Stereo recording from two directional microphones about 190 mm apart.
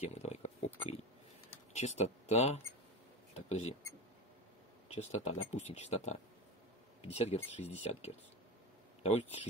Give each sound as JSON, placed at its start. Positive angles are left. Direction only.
{"t": 0.0, "sound": "a sound", "side_deg": 35}
{"t": 1.8, "sound": "speech", "side_deg": 35}
{"t": 4.8, "sound": "speech", "side_deg": 35}